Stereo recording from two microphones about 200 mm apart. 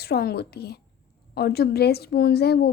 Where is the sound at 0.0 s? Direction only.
50° left (ahead or behind).